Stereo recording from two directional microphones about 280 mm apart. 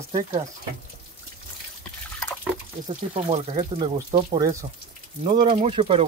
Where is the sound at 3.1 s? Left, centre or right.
Right.